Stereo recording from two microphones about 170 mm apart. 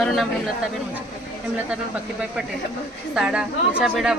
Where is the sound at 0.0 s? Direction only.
Centre (ahead or behind).